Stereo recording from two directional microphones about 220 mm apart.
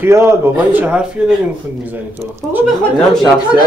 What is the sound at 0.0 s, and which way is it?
A woman's voice, 10° right (ahead or behind).